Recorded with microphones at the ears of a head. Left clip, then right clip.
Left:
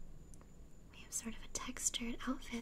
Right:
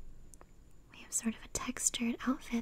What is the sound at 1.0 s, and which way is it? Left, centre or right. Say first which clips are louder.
Speech: right 8 dB; right.